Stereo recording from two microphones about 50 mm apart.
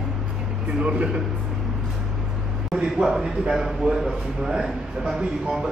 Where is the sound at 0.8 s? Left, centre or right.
Right.